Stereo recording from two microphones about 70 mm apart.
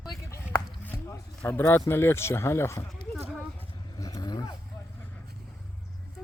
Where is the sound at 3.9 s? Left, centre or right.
Left.